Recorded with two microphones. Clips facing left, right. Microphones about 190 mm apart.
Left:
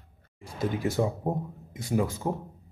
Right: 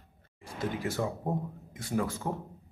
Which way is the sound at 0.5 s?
15° left (ahead or behind).